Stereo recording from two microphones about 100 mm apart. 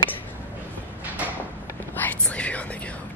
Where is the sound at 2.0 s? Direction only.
15° left (ahead or behind).